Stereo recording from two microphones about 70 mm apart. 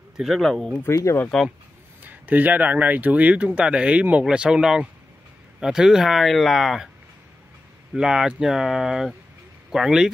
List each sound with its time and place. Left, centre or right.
0.2 s speech: centre
0.8 s speech: left
1.3 s speech: centre
2.0 s speech: right; by 6.9 s centre
7.9 s speech: centre